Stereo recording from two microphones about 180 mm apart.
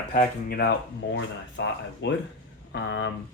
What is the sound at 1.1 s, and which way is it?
Speech, 75° left (ahead or behind).